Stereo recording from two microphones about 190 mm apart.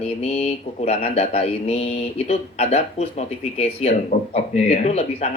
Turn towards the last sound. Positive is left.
turn(degrees=35)  # may be behind; listen again after turning